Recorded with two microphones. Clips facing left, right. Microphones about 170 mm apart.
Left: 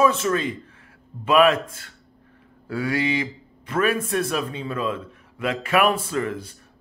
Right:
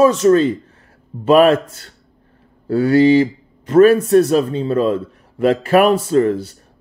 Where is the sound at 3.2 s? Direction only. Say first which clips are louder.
Right 12 dB; 40° right (ahead or behind).